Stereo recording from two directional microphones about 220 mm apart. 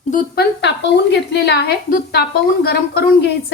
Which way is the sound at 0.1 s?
40° left (ahead or behind).